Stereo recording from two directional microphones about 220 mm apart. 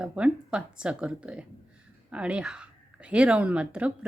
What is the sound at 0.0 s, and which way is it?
Speech, 5° right (ahead or behind).